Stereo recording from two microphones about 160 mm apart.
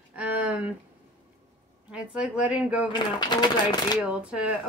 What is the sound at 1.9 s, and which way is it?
Speech, 5° right (ahead or behind).